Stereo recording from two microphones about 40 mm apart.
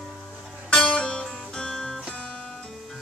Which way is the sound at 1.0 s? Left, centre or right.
Centre.